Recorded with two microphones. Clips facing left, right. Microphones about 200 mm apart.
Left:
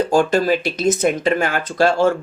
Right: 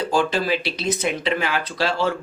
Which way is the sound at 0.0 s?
45° left (ahead or behind).